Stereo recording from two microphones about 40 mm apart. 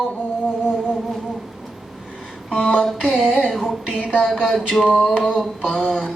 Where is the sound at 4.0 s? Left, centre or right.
Centre.